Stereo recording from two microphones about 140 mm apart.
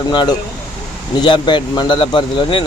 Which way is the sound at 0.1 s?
30° left (ahead or behind).